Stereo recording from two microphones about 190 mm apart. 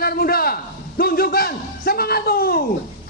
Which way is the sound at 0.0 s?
55° left (ahead or behind).